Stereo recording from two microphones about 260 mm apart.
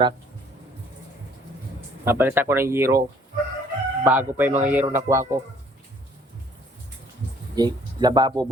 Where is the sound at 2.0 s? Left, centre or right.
Centre.